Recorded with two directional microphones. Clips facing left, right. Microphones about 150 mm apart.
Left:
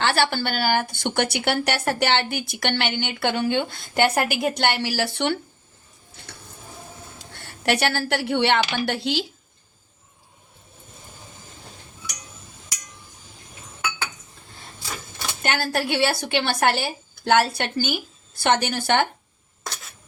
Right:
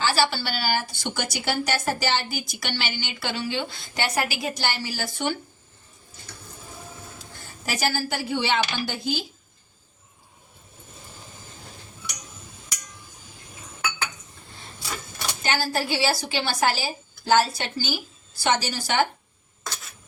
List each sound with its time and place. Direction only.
0.0 s a woman's voice: 60° left (ahead or behind)
7.2 s speech: 70° left (ahead or behind)
15.4 s a woman's voice: 60° left (ahead or behind)